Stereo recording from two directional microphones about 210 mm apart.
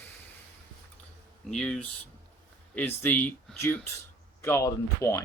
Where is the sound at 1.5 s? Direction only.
5° left (ahead or behind).